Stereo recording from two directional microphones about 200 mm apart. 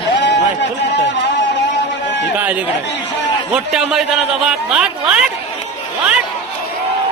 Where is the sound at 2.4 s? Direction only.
10° right (ahead or behind).